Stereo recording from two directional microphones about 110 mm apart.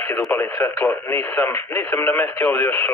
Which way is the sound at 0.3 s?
20° left (ahead or behind).